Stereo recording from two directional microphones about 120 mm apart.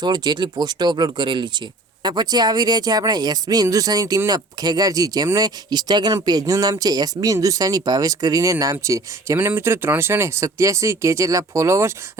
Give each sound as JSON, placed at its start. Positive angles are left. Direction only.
{"t": 0.0, "sound": "speech", "side_deg": -35}